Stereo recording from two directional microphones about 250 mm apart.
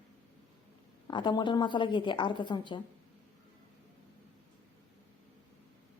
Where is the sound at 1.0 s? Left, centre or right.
Centre.